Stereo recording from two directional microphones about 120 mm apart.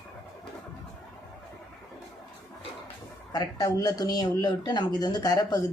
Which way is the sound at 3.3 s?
35° left (ahead or behind).